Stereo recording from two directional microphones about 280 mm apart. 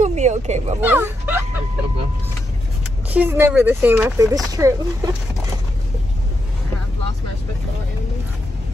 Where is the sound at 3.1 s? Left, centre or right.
Centre.